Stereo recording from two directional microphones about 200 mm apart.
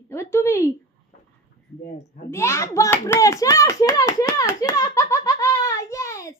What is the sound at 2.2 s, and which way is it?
A child's voice, 15° left (ahead or behind).